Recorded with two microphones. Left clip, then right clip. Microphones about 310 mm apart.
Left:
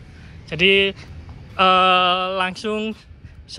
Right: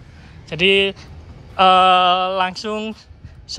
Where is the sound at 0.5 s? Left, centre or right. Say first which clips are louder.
Right 1 dB; centre.